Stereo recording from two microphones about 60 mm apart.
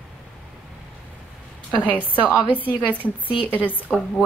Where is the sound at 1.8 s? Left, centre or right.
Left.